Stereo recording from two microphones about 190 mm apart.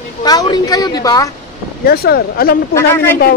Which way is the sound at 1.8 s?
55° left (ahead or behind).